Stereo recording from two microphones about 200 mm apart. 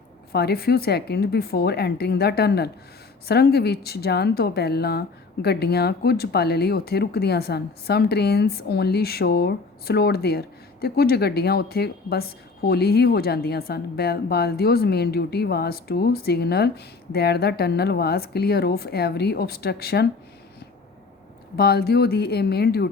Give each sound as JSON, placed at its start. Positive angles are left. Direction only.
{"t": 0.3, "sound": "a woman's voice", "side_deg": 50}
{"t": 21.5, "sound": "a woman's voice", "side_deg": 50}